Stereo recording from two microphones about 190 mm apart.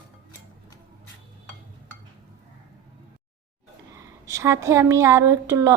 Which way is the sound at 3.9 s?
15° right (ahead or behind).